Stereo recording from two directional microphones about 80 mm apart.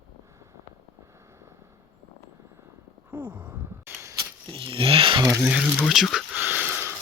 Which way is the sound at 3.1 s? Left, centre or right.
Centre.